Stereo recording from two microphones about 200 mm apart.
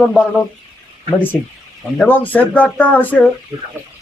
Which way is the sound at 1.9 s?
10° left (ahead or behind).